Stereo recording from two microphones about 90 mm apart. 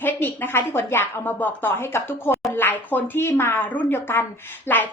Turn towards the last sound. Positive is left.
turn(degrees=25)  # may be behind; listen again after turning